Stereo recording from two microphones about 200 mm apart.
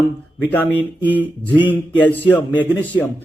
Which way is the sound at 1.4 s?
10° right (ahead or behind).